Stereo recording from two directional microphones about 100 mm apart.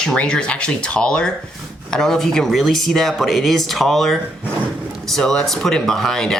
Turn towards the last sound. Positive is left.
turn(degrees=5)  # may be behind; listen again after turning